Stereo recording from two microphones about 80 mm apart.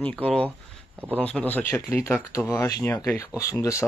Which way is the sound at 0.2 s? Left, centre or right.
Centre.